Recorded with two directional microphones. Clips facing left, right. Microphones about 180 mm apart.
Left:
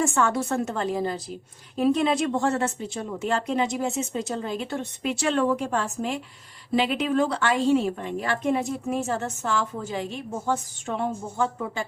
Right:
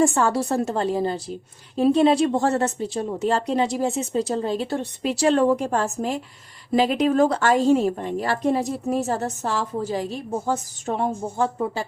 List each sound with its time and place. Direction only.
0.0 s a woman's voice: 35° right (ahead or behind)